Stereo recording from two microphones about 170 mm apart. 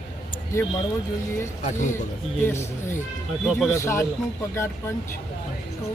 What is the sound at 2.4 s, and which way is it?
Speech, 15° left (ahead or behind).